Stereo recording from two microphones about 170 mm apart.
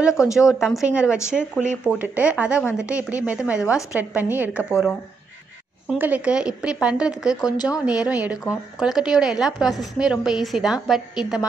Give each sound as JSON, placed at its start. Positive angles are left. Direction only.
{"t": 0.5, "sound": "a woman's voice", "side_deg": 0}
{"t": 7.3, "sound": "speech", "side_deg": 25}
{"t": 7.8, "sound": "a woman's voice", "side_deg": -5}